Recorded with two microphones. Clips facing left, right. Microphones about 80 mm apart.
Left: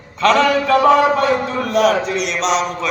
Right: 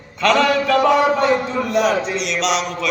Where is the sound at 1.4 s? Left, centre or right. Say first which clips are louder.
Left 2 dB; left.